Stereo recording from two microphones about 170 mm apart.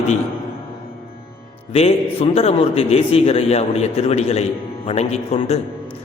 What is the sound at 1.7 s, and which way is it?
A man's voice, 35° left (ahead or behind).